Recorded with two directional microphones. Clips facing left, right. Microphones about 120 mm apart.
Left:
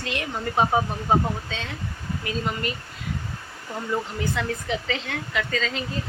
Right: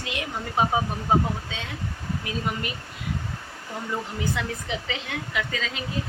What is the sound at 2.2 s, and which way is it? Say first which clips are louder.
Speech: left 3 dB; 15° right (ahead or behind).